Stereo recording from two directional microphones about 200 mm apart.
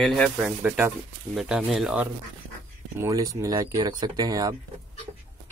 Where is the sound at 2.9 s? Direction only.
15° right (ahead or behind).